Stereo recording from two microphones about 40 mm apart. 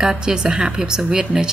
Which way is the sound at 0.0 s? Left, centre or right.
Centre.